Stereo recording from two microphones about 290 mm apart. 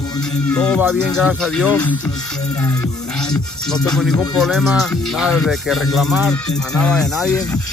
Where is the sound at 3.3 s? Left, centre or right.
Centre.